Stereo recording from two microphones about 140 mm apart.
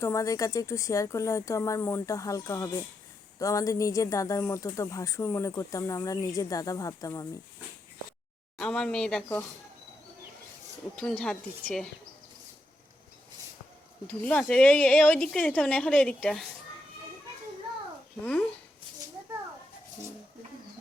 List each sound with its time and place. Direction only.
0.0 s speech: 20° left (ahead or behind)
8.5 s speech: 5° left (ahead or behind)
10.9 s a woman's voice: 5° left (ahead or behind)
14.3 s a woman's voice: 10° left (ahead or behind)